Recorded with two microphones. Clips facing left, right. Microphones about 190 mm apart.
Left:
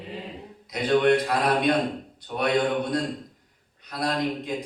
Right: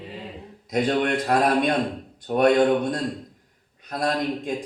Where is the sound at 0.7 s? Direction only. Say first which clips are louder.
Left 2 dB; 50° right (ahead or behind).